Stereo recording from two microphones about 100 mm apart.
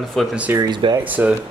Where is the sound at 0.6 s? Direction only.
45° right (ahead or behind).